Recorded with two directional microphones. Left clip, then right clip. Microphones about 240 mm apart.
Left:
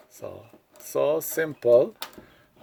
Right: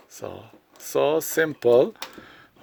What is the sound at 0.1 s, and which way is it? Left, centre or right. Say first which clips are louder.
Speech: right 3 dB; right.